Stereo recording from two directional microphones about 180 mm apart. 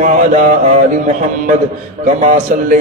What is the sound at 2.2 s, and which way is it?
Mantra, 45° right (ahead or behind).